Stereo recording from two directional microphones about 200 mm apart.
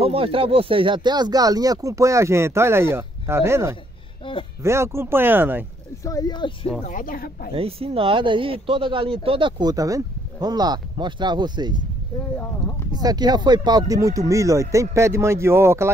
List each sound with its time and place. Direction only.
0.0 s speech: 30° right (ahead or behind); by 5.7 s 10° right (ahead or behind)
6.0 s speech: 20° left (ahead or behind)
6.9 s speech: 45° left (ahead or behind)
7.5 s speech: 30° right (ahead or behind)
12.9 s speech: 20° right (ahead or behind)